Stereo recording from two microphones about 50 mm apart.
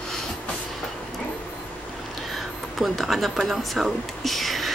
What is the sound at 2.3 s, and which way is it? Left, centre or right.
Speech, centre.